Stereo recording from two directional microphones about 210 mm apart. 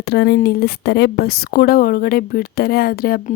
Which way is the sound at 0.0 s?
50° left (ahead or behind).